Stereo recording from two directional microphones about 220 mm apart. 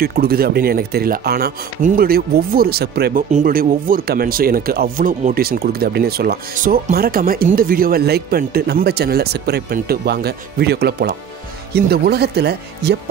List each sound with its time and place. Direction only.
0.0 s speech: 45° right (ahead or behind)